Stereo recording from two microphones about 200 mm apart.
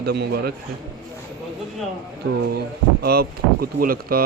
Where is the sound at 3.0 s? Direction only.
50° right (ahead or behind).